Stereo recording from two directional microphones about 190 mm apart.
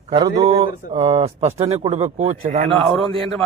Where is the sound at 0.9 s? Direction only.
30° right (ahead or behind).